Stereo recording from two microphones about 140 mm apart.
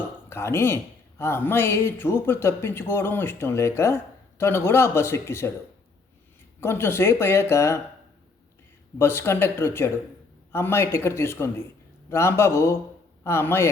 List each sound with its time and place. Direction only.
0.3 s speech: 15° left (ahead or behind)
6.6 s speech: 15° left (ahead or behind)
9.0 s a man's voice: 15° left (ahead or behind)